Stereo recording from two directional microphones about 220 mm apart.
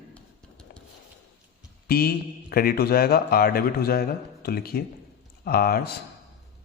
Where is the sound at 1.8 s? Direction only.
45° left (ahead or behind).